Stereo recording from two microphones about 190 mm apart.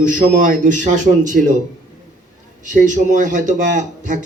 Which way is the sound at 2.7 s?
40° right (ahead or behind).